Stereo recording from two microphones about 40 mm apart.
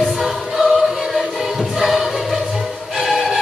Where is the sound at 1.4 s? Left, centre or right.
Centre.